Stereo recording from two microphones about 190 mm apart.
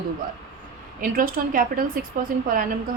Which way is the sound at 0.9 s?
45° right (ahead or behind).